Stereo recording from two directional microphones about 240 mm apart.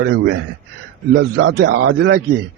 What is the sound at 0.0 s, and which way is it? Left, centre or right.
A man's voice, right.